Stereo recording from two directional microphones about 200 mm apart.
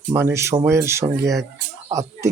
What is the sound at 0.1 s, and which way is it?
Speech, 15° right (ahead or behind).